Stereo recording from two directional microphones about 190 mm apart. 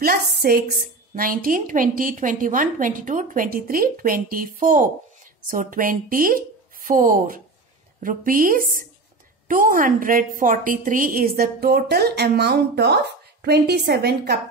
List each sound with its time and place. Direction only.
0.0 s a woman's voice: 50° right (ahead or behind)